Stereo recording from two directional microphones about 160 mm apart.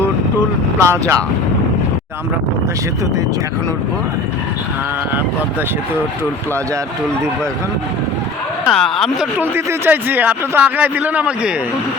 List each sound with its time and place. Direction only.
0.8 s a man's voice: 20° right (ahead or behind)
8.6 s speech: centre (ahead or behind)
9.4 s a man's voice: 15° right (ahead or behind)